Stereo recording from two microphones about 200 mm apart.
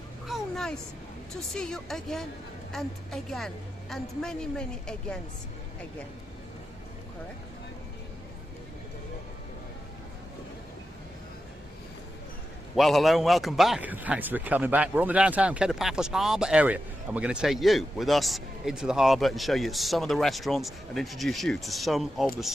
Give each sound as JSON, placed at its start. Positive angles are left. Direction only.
{"t": 0.3, "sound": "a sound", "side_deg": 0}
{"t": 1.3, "sound": "a man's voice", "side_deg": 5}
{"t": 12.7, "sound": "a man's voice", "side_deg": 0}